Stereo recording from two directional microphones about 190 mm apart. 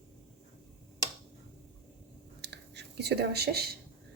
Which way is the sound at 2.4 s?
60° right (ahead or behind).